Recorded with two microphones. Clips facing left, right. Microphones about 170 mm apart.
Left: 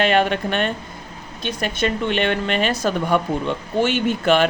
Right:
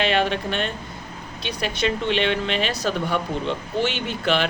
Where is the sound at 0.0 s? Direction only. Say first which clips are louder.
Left 4 dB; 50° left (ahead or behind).